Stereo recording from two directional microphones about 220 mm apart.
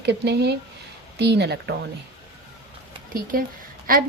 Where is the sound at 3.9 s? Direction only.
40° right (ahead or behind).